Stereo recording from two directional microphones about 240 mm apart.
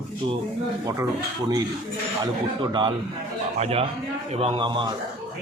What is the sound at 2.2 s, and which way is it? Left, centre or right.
Speech, centre.